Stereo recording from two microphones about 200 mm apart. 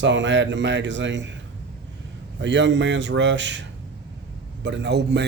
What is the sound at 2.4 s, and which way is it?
A man's voice, 60° right (ahead or behind).